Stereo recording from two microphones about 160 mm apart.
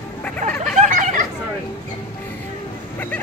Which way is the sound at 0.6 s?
50° right (ahead or behind).